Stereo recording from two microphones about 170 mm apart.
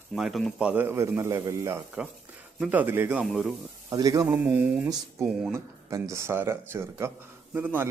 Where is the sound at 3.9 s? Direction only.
20° right (ahead or behind).